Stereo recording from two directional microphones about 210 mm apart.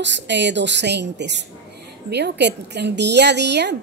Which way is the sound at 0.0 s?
55° right (ahead or behind).